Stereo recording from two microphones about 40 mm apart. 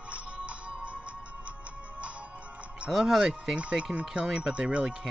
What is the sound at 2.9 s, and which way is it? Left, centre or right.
Speech, centre.